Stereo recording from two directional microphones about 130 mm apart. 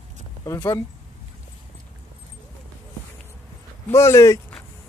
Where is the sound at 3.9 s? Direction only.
20° left (ahead or behind).